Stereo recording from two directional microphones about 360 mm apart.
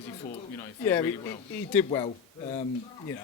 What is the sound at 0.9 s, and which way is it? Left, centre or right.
A man's voice, centre.